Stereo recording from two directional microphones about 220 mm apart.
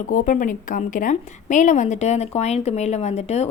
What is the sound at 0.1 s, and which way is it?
A woman's voice, 35° left (ahead or behind).